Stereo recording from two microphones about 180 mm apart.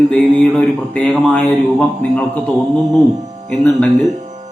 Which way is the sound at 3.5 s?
5° left (ahead or behind).